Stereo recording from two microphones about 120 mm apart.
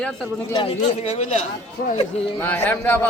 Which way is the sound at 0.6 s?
60° left (ahead or behind).